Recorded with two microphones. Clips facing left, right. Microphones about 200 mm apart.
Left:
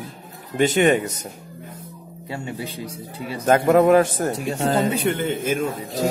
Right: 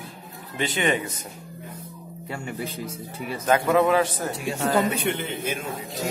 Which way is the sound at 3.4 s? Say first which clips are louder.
Left 5 dB; 45° left (ahead or behind).